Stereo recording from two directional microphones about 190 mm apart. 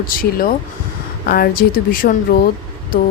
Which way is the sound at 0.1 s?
50° left (ahead or behind).